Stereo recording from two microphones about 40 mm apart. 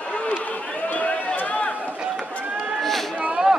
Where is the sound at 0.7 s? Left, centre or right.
Left.